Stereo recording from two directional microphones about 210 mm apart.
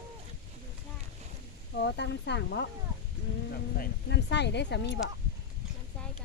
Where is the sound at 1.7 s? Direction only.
55° left (ahead or behind).